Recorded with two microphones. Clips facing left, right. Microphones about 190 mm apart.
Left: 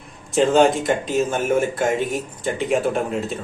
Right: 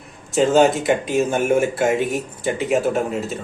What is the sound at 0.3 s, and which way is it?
Speech, centre (ahead or behind).